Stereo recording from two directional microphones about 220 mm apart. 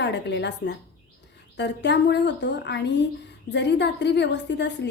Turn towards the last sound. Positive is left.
turn(degrees=50)  # may be behind; listen again after turning